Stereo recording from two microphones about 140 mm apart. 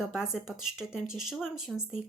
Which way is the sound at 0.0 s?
5° right (ahead or behind).